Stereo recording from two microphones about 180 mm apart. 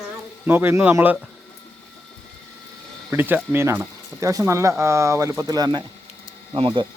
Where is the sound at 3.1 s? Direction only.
10° right (ahead or behind); by 6.8 s 25° right (ahead or behind).